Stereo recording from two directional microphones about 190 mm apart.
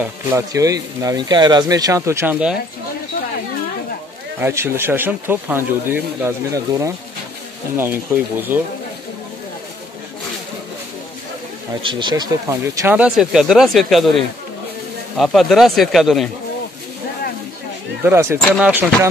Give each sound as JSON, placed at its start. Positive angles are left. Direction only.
{"t": 0.0, "sound": "speech", "side_deg": -15}
{"t": 4.4, "sound": "speech", "side_deg": -15}
{"t": 11.7, "sound": "speech", "side_deg": -25}
{"t": 18.0, "sound": "speech", "side_deg": -15}